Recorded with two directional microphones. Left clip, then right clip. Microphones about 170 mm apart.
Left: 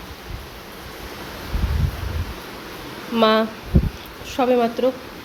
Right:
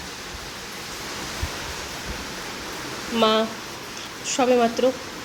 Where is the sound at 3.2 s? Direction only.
20° left (ahead or behind).